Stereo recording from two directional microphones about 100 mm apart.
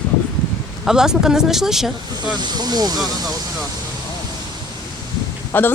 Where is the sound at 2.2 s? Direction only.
45° right (ahead or behind).